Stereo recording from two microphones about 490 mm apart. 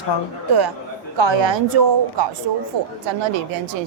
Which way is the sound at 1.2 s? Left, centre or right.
Right.